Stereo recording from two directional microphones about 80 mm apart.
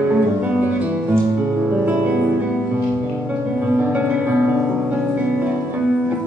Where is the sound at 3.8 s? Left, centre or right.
Centre.